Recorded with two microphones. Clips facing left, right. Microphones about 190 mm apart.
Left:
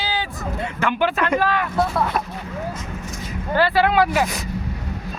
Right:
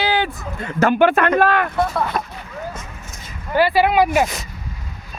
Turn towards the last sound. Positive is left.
turn(degrees=-15)  # may be behind; listen again after turning